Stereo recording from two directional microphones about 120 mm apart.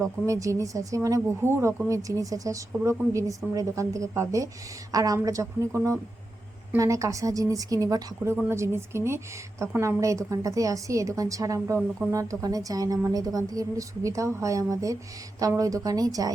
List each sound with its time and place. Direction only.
0.0 s speech: 25° right (ahead or behind)